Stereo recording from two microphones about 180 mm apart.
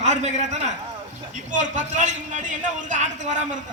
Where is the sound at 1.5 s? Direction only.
45° right (ahead or behind).